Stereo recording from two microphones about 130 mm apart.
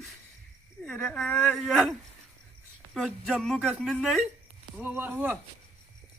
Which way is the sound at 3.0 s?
Centre (ahead or behind).